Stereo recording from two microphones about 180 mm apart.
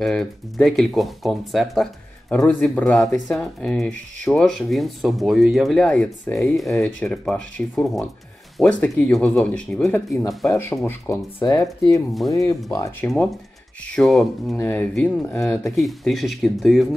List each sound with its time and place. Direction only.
0.0 s speech: centre (ahead or behind)
13.9 s speech: centre (ahead or behind)